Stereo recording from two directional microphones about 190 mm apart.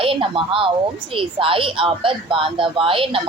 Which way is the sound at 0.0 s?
25° right (ahead or behind).